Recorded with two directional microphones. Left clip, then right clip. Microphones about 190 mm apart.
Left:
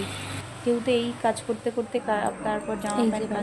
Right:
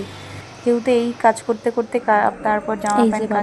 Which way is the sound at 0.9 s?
20° right (ahead or behind).